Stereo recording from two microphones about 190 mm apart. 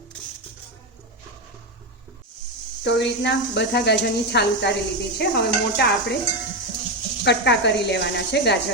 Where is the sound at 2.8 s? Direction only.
65° left (ahead or behind).